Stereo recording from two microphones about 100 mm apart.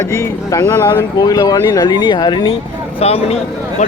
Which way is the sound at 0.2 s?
25° left (ahead or behind).